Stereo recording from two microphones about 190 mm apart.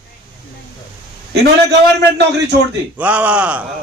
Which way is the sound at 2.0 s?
65° right (ahead or behind).